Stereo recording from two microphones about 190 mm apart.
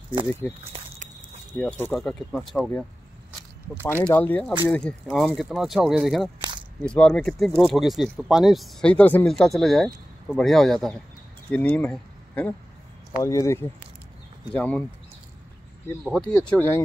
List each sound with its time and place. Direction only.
0.7 s a sound: 30° right (ahead or behind)
1.6 s speech: 10° left (ahead or behind)
3.8 s speech: 10° left (ahead or behind)
16.0 s speech: centre (ahead or behind)